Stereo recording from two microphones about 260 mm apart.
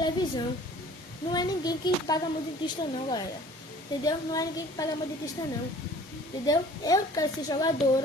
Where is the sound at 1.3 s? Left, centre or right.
Centre.